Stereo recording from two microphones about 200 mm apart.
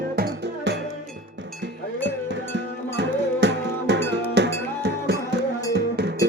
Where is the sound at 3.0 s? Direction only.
60° right (ahead or behind).